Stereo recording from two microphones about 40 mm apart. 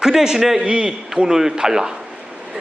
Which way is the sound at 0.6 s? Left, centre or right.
Right.